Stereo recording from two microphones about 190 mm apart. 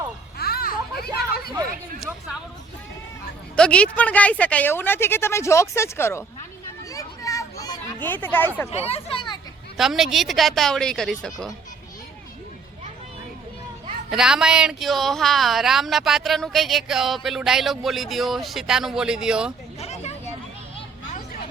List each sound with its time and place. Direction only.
0.3 s children playing: 55° left (ahead or behind)
2.0 s speech: 5° right (ahead or behind)
3.5 s a woman's voice: 5° left (ahead or behind)
6.9 s a sound: 15° left (ahead or behind)
8.0 s a woman's voice: 10° left (ahead or behind)
8.7 s speech: 30° left (ahead or behind)
9.7 s speech: centre (ahead or behind)
14.1 s speech: 5° right (ahead or behind)
19.8 s vehicle: 35° left (ahead or behind)